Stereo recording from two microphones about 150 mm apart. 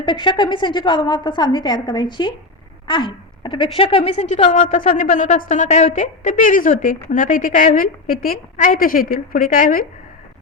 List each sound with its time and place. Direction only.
0.0 s a woman's voice: 30° left (ahead or behind)
4.5 s a woman's voice: 60° left (ahead or behind)